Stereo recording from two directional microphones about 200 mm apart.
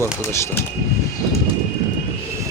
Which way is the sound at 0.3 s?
15° left (ahead or behind).